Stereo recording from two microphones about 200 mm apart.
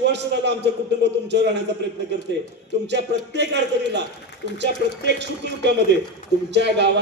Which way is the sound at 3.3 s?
60° right (ahead or behind).